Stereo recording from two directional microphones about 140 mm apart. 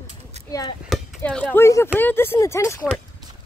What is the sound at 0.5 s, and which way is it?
Speech, 25° left (ahead or behind).